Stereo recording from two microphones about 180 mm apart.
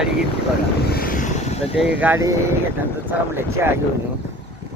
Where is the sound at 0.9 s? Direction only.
55° left (ahead or behind); by 1.7 s 40° left (ahead or behind).